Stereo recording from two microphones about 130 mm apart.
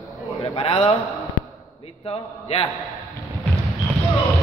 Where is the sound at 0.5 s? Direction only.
50° left (ahead or behind).